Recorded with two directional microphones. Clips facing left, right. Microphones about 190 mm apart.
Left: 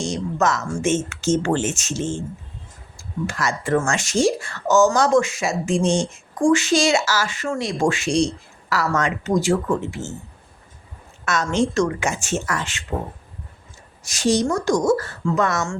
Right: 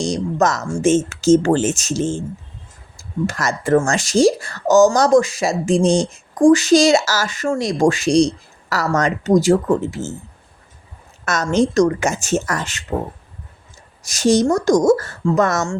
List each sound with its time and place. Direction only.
0.0 s speech: 35° right (ahead or behind)
3.2 s speech: 40° right (ahead or behind)
11.3 s speech: 40° right (ahead or behind)
14.0 s speech: 40° right (ahead or behind)